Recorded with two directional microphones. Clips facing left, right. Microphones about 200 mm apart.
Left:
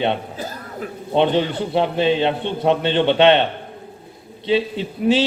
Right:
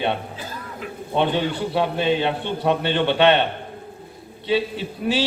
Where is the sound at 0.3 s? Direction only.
40° left (ahead or behind).